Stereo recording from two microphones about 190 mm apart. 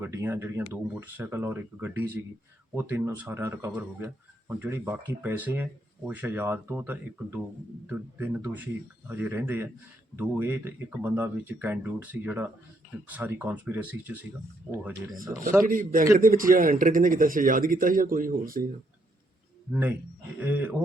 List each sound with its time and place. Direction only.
0.0 s speech: 10° right (ahead or behind)
15.6 s a man's voice: 45° right (ahead or behind)
20.4 s speech: 10° right (ahead or behind)